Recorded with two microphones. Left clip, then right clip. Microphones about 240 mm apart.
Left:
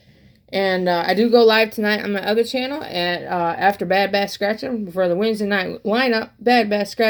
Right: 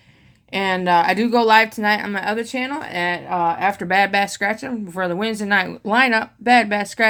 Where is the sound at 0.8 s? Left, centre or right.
Right.